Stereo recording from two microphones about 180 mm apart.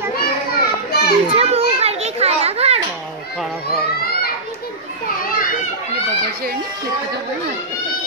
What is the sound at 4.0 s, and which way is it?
Children playing, 60° left (ahead or behind).